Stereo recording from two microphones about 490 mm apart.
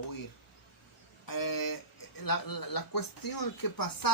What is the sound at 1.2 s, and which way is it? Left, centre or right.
Speech, left.